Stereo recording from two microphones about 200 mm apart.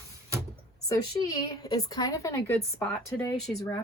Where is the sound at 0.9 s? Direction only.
20° left (ahead or behind).